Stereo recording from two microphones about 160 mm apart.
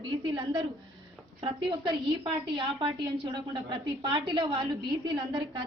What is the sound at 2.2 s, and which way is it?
A woman's voice, 30° right (ahead or behind).